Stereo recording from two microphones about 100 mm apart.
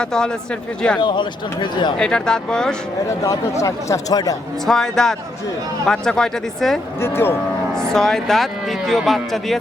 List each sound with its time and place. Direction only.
0.0 s speech: 5° left (ahead or behind)
0.9 s speech: 50° left (ahead or behind)
2.0 s speech: 5° left (ahead or behind)
3.6 s speech: 30° left (ahead or behind)
4.6 s speech: 5° left (ahead or behind)
7.0 s speech: 25° left (ahead or behind)
7.8 s speech: 5° left (ahead or behind)